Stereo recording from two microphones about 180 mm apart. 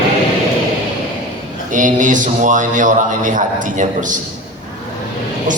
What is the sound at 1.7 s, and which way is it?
Speech, 45° right (ahead or behind).